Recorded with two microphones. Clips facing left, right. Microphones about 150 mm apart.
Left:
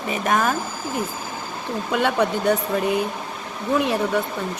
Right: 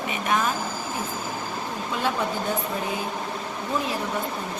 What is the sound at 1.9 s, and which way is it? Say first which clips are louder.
Speech: left 6 dB; 70° left (ahead or behind).